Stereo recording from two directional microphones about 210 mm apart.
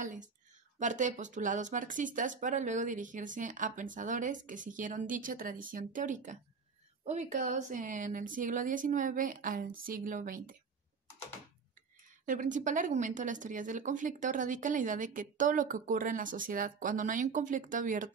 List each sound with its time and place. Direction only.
0.0 s a woman's voice: 35° right (ahead or behind)
12.3 s speech: 35° right (ahead or behind)